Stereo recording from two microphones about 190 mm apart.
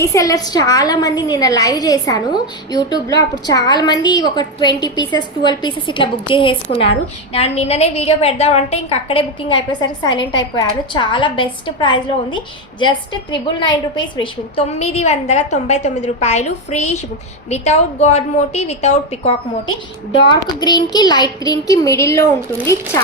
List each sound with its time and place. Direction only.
0.0 s a woman's voice: 15° left (ahead or behind)
13.5 s a woman's voice: 25° left (ahead or behind)
20.2 s a woman's voice: 20° left (ahead or behind)